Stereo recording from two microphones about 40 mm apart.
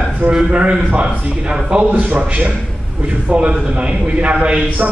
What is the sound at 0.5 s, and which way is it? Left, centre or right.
A man's voice, right.